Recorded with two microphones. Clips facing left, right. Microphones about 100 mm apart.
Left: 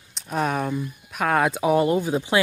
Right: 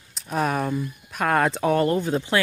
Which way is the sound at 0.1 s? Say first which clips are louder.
Even; centre (ahead or behind).